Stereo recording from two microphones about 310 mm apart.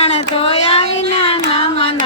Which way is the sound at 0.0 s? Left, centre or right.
Centre.